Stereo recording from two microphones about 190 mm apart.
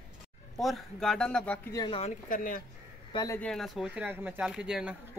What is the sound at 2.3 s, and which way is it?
Speech, 45° left (ahead or behind).